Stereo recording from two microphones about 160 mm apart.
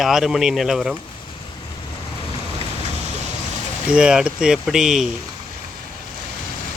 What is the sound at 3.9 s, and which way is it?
Speech, 5° right (ahead or behind).